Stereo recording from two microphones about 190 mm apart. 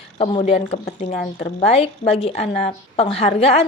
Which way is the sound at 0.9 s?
45° left (ahead or behind).